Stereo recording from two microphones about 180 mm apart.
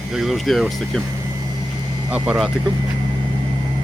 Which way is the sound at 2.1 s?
5° right (ahead or behind).